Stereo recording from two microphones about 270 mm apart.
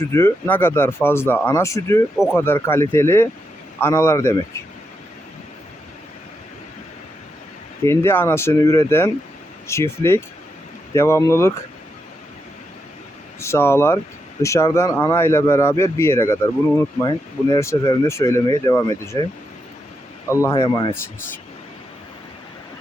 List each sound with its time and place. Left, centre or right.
0.0 s speech: centre
7.9 s speech: centre
13.4 s speech: centre
20.3 s speech: centre